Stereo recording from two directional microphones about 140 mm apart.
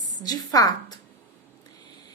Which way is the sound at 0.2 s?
30° left (ahead or behind).